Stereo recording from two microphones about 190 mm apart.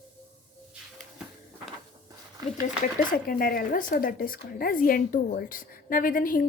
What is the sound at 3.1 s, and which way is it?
Speech, 50° left (ahead or behind).